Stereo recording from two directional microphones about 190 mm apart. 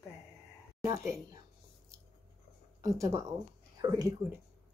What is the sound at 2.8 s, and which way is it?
Speech, 15° right (ahead or behind).